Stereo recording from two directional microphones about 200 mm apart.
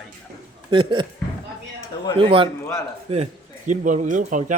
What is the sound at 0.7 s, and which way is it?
Speech, 25° right (ahead or behind).